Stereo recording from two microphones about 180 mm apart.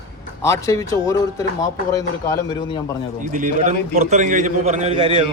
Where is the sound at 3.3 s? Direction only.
45° right (ahead or behind).